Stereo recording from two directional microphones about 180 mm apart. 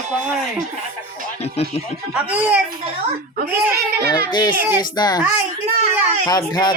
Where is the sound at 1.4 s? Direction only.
35° left (ahead or behind).